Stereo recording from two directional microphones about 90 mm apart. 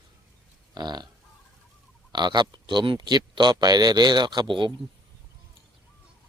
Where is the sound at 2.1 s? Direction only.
55° right (ahead or behind).